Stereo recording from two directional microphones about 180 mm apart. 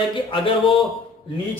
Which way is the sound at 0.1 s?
30° left (ahead or behind).